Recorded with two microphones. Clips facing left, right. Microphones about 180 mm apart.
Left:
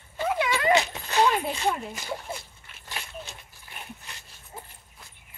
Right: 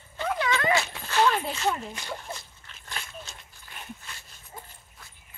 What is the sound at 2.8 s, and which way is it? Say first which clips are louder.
Dog: left 2 dB; 15° left (ahead or behind).